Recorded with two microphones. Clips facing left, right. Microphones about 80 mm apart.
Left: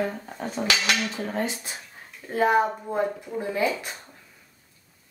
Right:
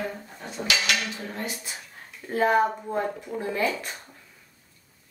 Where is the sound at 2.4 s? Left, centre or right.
Centre.